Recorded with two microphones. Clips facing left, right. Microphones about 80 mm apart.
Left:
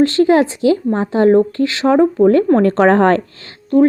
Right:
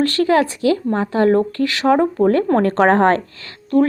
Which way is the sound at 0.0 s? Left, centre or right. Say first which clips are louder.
Left 4 dB; left.